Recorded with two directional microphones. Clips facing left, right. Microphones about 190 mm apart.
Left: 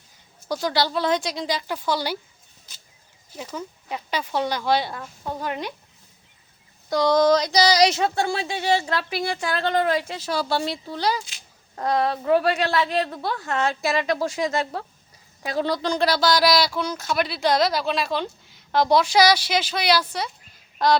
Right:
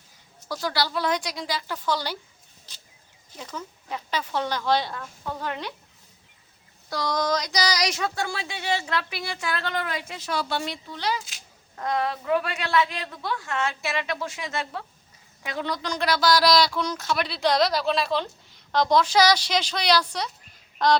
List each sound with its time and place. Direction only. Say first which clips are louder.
0.6 s a sound: left 3 dB; 20° left (ahead or behind)
3.3 s speech: left 4 dB; 15° left (ahead or behind)
6.9 s a sound: left 8 dB; 25° left (ahead or behind)
11.8 s a woman's voice: left 4 dB; 35° left (ahead or behind)
16.4 s speech: left 1 dB; 5° left (ahead or behind)
20.7 s fowl: left 1 dB; 5° left (ahead or behind)